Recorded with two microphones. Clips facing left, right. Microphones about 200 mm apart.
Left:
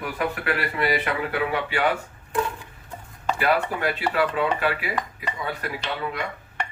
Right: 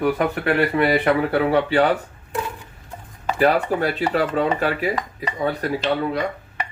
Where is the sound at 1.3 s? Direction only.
40° right (ahead or behind).